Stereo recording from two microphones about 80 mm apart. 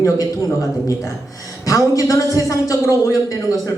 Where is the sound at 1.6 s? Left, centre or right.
Left.